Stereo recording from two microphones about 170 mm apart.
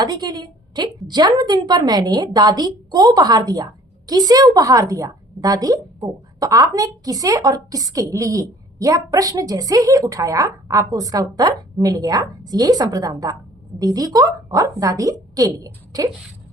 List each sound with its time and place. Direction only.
0.0 s a woman's voice: 25° right (ahead or behind)